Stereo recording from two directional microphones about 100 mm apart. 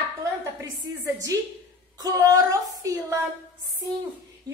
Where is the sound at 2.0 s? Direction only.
35° right (ahead or behind).